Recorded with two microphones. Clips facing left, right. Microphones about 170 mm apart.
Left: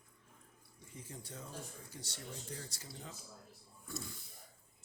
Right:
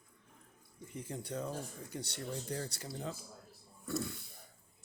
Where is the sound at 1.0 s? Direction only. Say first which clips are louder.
Right 10 dB; 65° right (ahead or behind).